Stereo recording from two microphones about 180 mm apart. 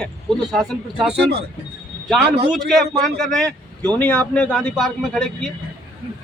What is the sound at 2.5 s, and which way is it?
Speech, centre (ahead or behind).